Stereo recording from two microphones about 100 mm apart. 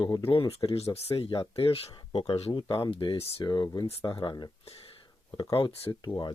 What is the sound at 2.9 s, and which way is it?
Speech, 65° left (ahead or behind).